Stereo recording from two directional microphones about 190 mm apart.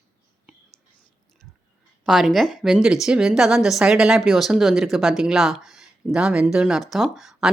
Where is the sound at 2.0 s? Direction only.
Centre (ahead or behind).